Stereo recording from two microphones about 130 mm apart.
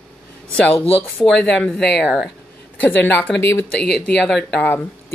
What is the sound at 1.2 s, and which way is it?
Speech, 5° left (ahead or behind).